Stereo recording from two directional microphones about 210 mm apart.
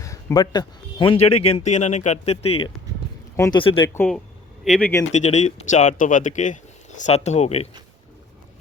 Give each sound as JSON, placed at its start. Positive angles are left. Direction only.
{"t": 0.0, "sound": "speech", "side_deg": 15}
{"t": 3.3, "sound": "speech", "side_deg": 15}
{"t": 3.6, "sound": "speech", "side_deg": 25}
{"t": 3.9, "sound": "speech", "side_deg": 5}
{"t": 5.1, "sound": "speech", "side_deg": 35}